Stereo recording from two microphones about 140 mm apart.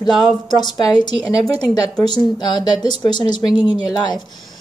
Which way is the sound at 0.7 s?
30° left (ahead or behind).